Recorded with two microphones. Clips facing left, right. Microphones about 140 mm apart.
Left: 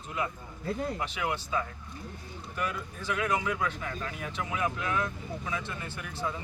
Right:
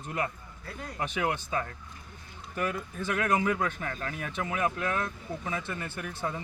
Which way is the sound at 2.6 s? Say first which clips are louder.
Right 3 dB; 45° right (ahead or behind).